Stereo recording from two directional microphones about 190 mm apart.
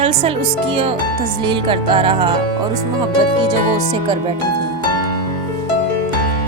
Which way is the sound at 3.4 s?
20° right (ahead or behind).